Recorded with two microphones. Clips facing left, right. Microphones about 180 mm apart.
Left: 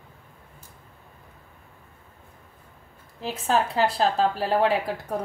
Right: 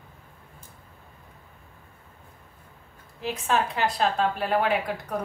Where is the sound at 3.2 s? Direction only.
35° left (ahead or behind).